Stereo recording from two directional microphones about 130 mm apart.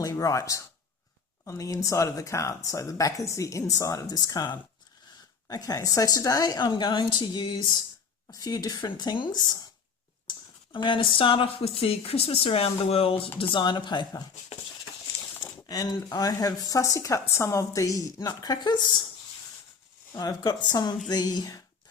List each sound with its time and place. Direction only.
0.0 s a woman's voice: 25° left (ahead or behind)
15.6 s a woman's voice: 30° left (ahead or behind)
20.1 s a woman's voice: 30° left (ahead or behind)